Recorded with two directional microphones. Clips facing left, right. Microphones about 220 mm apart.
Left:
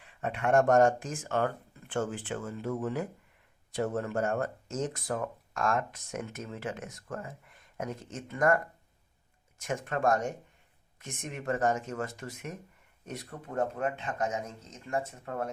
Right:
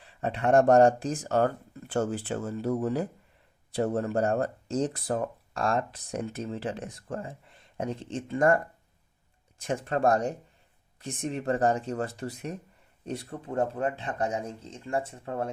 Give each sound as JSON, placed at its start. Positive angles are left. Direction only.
{"t": 0.0, "sound": "speech", "side_deg": -35}